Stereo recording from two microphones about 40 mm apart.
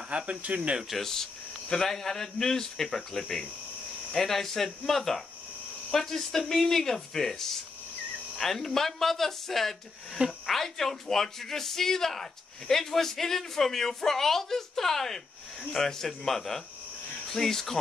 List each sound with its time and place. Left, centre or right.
0.1 s speech: right
1.0 s speech: centre